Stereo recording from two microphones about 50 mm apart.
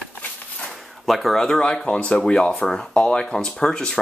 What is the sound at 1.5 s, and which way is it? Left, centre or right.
Speech, centre.